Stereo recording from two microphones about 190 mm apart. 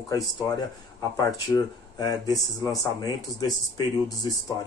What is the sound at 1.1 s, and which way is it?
Speech, 20° left (ahead or behind).